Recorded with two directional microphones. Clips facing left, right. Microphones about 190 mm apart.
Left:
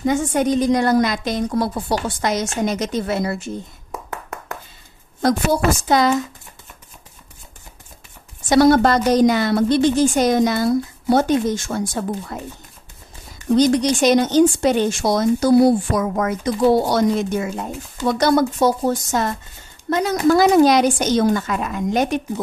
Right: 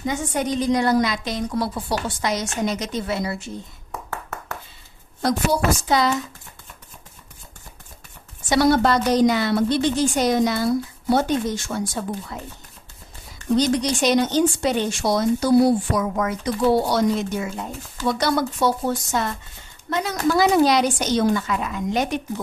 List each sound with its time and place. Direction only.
0.0 s speech: 50° left (ahead or behind)
5.2 s speech: 50° left (ahead or behind)
8.5 s speech: 45° left (ahead or behind)
13.6 s speech: 45° left (ahead or behind)